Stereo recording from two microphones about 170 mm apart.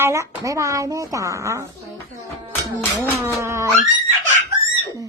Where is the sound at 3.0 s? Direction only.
15° right (ahead or behind).